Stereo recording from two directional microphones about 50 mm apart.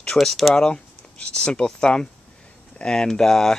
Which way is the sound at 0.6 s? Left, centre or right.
Centre.